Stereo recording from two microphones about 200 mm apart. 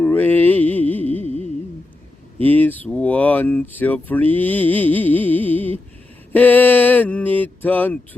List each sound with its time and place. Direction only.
0.0 s music: 5° left (ahead or behind)
1.2 s music: 30° right (ahead or behind)
2.4 s speech: 10° left (ahead or behind)